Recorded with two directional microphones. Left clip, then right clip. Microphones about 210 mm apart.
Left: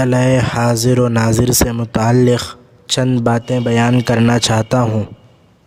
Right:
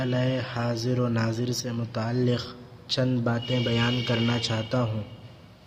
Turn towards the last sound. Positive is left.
turn(degrees=50)  # may be behind; listen again after turning